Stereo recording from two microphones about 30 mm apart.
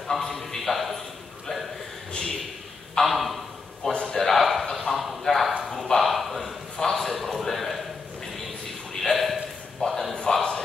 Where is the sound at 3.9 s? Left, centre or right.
Left.